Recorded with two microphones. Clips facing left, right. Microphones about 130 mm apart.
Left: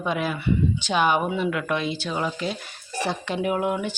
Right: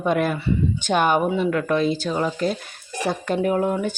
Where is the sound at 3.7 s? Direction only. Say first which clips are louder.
Right 3 dB; 40° right (ahead or behind).